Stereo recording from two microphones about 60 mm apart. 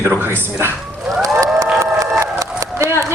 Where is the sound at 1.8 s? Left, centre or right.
Right.